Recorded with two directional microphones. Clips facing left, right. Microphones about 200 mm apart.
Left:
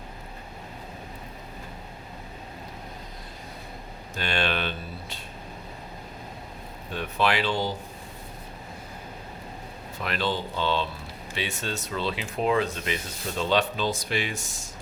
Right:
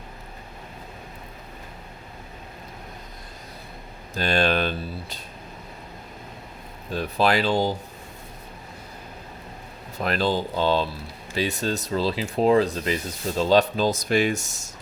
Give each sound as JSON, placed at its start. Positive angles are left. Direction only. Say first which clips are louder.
{"t": 4.1, "sound": "speech", "louder": "right 6 dB", "side_deg": -40}
{"t": 6.9, "sound": "speech", "louder": "right 4 dB", "side_deg": -35}
{"t": 10.0, "sound": "speech", "louder": "right 5 dB", "side_deg": -40}